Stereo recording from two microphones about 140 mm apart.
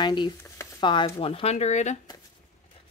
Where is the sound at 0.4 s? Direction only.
20° left (ahead or behind).